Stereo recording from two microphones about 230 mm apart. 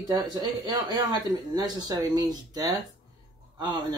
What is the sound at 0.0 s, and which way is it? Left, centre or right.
Speech, centre.